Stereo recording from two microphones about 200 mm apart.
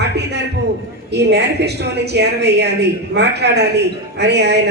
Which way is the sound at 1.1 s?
55° right (ahead or behind).